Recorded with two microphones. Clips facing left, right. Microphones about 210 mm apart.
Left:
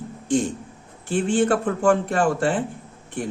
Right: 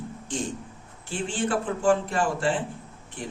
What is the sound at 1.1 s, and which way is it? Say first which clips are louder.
Speech: left 8 dB; 45° left (ahead or behind).